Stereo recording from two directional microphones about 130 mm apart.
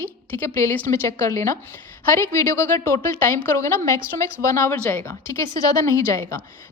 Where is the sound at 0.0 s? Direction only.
20° left (ahead or behind).